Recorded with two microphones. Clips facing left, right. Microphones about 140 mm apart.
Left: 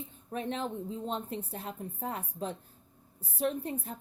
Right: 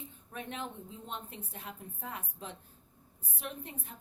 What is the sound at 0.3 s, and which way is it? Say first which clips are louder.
A woman's voice: left 7 dB; 35° left (ahead or behind).